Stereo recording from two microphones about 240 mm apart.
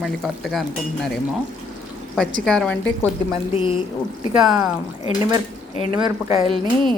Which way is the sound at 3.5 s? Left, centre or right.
Left.